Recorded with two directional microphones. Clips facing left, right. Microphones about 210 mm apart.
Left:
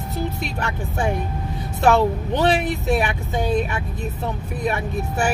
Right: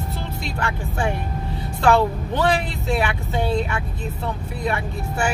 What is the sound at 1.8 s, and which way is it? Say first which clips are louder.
Speech: left 1 dB; 20° left (ahead or behind).